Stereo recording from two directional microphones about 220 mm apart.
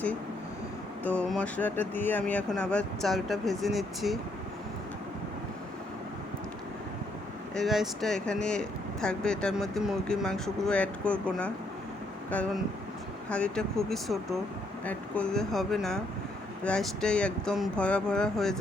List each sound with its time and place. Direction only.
1.0 s speech: 5° left (ahead or behind)
7.5 s speech: centre (ahead or behind)
13.3 s speech: 5° left (ahead or behind)